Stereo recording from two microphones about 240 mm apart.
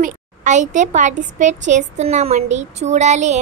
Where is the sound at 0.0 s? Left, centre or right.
Right.